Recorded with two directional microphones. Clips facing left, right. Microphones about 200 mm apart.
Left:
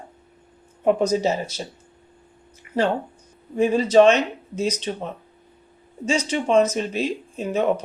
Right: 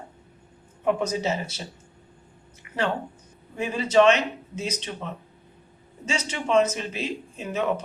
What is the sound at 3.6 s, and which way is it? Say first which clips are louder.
Speech: left 5 dB; 40° left (ahead or behind).